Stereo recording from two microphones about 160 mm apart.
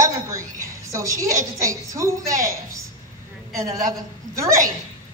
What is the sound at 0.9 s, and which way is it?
A woman's voice, 20° right (ahead or behind).